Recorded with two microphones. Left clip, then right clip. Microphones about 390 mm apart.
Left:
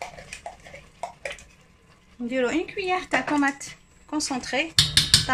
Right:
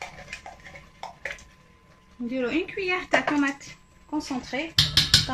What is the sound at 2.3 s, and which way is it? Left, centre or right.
Speech, centre.